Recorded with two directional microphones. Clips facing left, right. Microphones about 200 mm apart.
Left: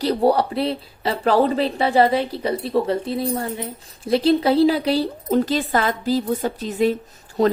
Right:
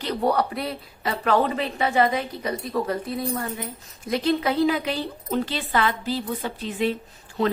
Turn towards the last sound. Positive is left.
turn(degrees=40)  # may be behind; listen again after turning